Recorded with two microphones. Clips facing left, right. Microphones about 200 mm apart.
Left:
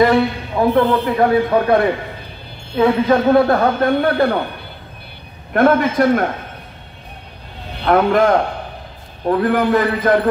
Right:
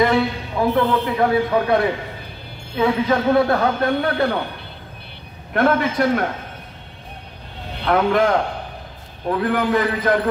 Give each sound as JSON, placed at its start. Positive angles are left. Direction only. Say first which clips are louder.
{"t": 0.0, "sound": "a man's voice", "louder": "left 4 dB", "side_deg": 50}
{"t": 5.5, "sound": "a man's voice", "louder": "left 4 dB", "side_deg": 50}
{"t": 7.8, "sound": "a man's voice", "louder": "left 3 dB", "side_deg": 45}